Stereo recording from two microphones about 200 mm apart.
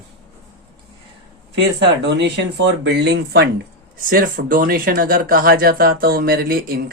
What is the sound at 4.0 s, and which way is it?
Speech, 45° right (ahead or behind).